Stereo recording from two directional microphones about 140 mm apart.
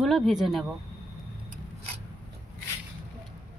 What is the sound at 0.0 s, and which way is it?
Speech, centre (ahead or behind).